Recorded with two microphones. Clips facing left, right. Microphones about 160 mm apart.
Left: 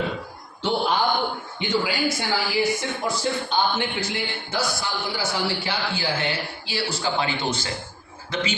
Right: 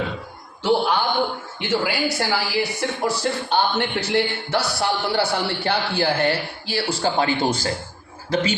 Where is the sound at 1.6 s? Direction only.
70° right (ahead or behind).